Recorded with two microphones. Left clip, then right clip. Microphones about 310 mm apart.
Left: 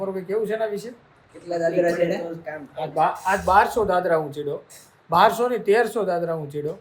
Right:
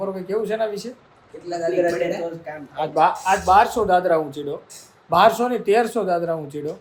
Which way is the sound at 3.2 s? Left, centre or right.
Centre.